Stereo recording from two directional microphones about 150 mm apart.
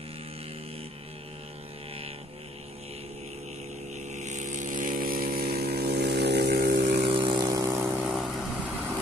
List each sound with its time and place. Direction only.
4.1 s vehicle: 50° right (ahead or behind); by 6.8 s 90° right
6.8 s vehicle: 45° right (ahead or behind); by 8.1 s 15° right (ahead or behind)
8.1 s vehicle: 5° right (ahead or behind)